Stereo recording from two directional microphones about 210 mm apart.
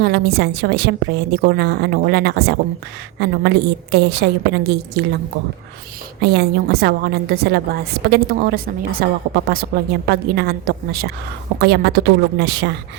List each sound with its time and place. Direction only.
0.0 s a woman's voice: 50° right (ahead or behind)
6.3 s a woman's voice: 50° right (ahead or behind)